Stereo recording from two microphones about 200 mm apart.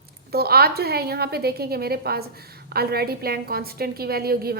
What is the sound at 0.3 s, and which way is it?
A woman's voice, 50° right (ahead or behind).